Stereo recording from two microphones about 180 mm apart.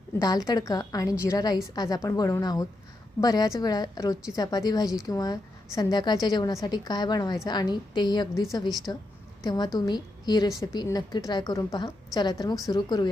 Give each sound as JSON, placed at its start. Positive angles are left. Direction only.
{"t": 0.2, "sound": "a woman's voice", "side_deg": 20}